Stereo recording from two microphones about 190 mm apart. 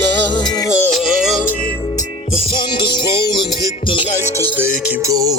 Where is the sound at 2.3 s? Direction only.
25° left (ahead or behind).